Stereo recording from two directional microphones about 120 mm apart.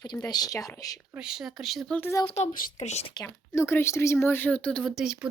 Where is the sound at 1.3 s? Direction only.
Centre (ahead or behind).